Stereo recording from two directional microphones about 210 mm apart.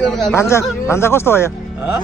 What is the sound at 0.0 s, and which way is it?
Speech, centre (ahead or behind).